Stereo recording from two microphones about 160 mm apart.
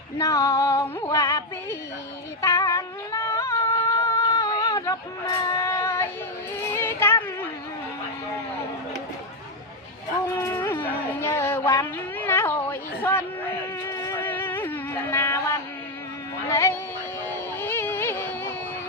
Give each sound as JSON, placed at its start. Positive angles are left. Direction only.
{"t": 0.2, "sound": "female singing", "side_deg": 20}
{"t": 2.4, "sound": "a sound", "side_deg": 20}
{"t": 6.7, "sound": "music", "side_deg": 15}
{"t": 10.3, "sound": "speech", "side_deg": 15}
{"t": 13.8, "sound": "music", "side_deg": 15}
{"t": 16.5, "sound": "speech", "side_deg": 15}
{"t": 17.2, "sound": "music", "side_deg": 15}